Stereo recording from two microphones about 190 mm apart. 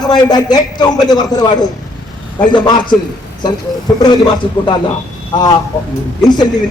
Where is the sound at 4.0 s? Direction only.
25° left (ahead or behind).